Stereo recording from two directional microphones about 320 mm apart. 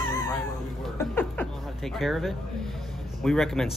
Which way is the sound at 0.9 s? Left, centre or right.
Centre.